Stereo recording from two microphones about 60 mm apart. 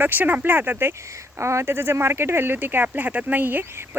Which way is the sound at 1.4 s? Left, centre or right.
Right.